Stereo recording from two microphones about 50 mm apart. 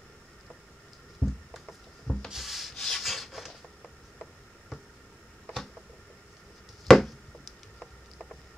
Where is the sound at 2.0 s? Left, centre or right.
Centre.